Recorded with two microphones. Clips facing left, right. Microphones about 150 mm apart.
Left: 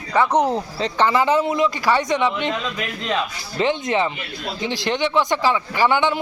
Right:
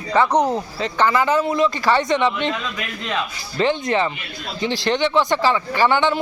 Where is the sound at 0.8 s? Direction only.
30° left (ahead or behind); by 2.6 s 15° left (ahead or behind).